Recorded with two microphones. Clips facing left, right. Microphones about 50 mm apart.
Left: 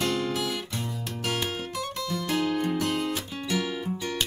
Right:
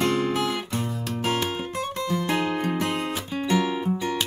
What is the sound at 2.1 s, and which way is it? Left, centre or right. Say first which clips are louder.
Music: right 2 dB; right.